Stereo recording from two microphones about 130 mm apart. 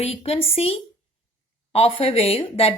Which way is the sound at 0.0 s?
50° left (ahead or behind).